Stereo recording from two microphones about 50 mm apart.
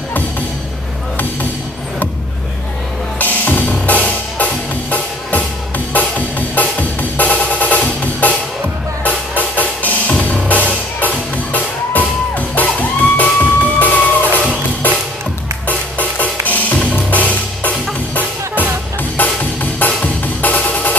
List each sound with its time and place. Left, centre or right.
3.2 s music: left
9.4 s music: left
15.6 s music: left